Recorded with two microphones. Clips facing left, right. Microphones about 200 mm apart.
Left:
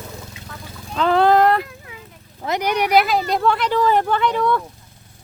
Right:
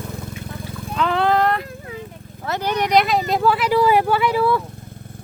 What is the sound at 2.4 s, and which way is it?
Speech, 15° left (ahead or behind).